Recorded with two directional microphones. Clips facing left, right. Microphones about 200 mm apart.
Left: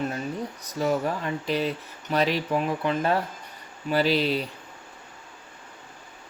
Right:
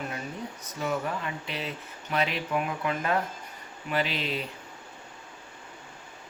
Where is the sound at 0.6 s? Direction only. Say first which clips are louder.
Left 5 dB; 35° left (ahead or behind).